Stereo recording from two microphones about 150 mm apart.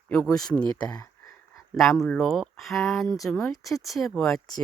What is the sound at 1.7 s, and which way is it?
Speech, centre (ahead or behind).